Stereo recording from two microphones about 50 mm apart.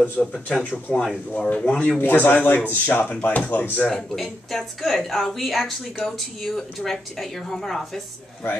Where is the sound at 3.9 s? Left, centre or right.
Centre.